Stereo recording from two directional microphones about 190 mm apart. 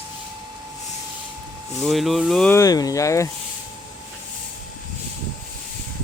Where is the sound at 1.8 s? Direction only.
Centre (ahead or behind).